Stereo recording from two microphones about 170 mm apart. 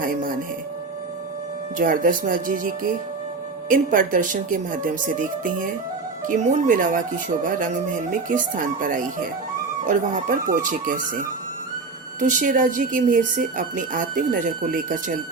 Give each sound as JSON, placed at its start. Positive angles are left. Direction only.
{"t": 0.0, "sound": "speech", "side_deg": -55}
{"t": 1.8, "sound": "speech", "side_deg": -55}